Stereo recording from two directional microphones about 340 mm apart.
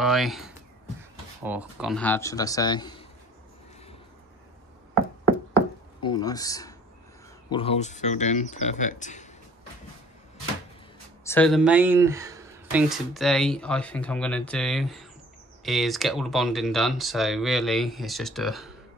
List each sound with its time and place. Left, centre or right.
0.0 s speech: centre
6.0 s speech: centre
11.2 s speech: centre